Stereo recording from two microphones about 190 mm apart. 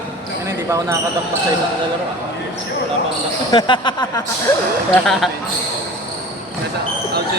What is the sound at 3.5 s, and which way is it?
Speech, 25° left (ahead or behind).